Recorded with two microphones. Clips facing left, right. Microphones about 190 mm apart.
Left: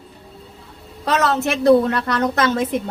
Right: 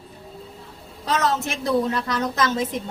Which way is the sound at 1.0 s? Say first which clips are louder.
Left 4 dB; 65° left (ahead or behind).